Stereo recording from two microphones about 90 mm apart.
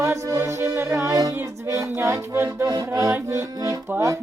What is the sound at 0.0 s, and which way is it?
Music, 35° right (ahead or behind).